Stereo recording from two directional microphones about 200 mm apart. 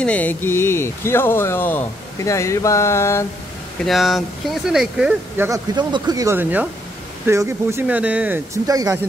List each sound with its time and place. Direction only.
0.0 s speech: 10° left (ahead or behind)
3.8 s speech: centre (ahead or behind)
5.5 s speech: 20° right (ahead or behind)